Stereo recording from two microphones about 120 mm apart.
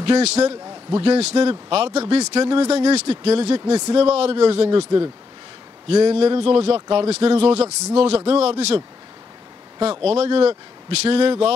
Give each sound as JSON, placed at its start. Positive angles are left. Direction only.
{"t": 0.0, "sound": "speech", "side_deg": -60}
{"t": 0.9, "sound": "speech", "side_deg": -55}
{"t": 2.4, "sound": "speech", "side_deg": -45}
{"t": 2.7, "sound": "speech", "side_deg": -60}
{"t": 3.6, "sound": "speech", "side_deg": -35}
{"t": 3.9, "sound": "speech", "side_deg": -55}
{"t": 4.6, "sound": "speech", "side_deg": -35}
{"t": 5.9, "sound": "speech", "side_deg": -55}